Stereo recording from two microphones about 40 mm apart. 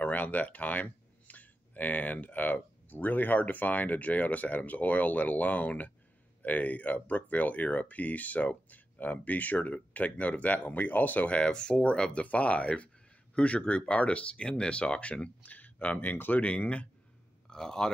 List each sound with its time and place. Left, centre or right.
0.0 s speech: left
11.2 s speech: left
15.2 s speech: left
16.0 s speech: left
16.4 s speech: left
17.5 s speech: centre